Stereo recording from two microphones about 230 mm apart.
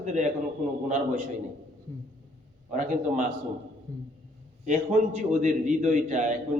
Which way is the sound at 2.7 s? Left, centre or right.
Right.